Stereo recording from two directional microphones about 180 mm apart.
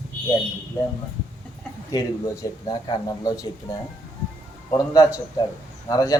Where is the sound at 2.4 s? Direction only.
20° left (ahead or behind).